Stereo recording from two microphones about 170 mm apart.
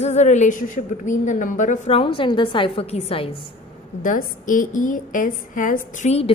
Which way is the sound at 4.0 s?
50° left (ahead or behind).